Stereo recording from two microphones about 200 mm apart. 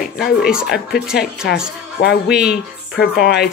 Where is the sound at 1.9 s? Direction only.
55° left (ahead or behind).